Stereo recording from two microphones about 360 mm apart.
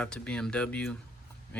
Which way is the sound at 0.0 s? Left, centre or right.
Centre.